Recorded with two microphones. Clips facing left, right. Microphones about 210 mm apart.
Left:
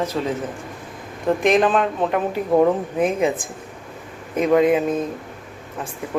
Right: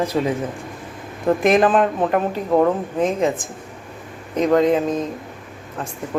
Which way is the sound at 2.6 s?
10° left (ahead or behind).